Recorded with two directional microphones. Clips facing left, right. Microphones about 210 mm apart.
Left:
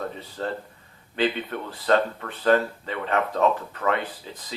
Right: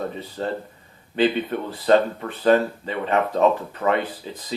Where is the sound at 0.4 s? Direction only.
20° right (ahead or behind).